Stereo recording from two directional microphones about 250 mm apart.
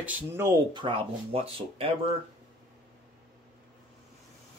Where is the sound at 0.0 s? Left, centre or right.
Centre.